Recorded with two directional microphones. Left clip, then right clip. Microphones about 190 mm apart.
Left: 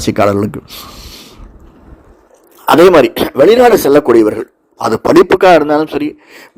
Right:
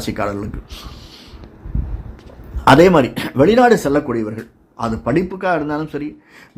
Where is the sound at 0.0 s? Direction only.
40° left (ahead or behind).